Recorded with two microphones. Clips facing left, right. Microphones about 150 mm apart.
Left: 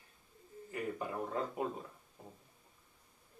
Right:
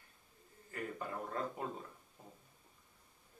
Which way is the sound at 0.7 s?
15° left (ahead or behind).